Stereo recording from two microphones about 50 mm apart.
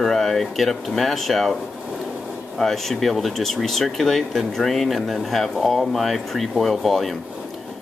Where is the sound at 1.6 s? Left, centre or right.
Centre.